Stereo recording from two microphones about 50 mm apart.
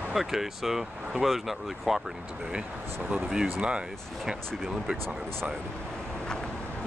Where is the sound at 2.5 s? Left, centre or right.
Centre.